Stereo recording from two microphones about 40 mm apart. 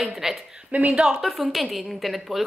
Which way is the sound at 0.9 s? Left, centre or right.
Centre.